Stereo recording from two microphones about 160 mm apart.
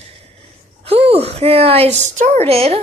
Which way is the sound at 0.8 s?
40° right (ahead or behind).